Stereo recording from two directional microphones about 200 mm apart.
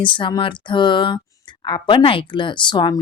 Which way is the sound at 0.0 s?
25° left (ahead or behind).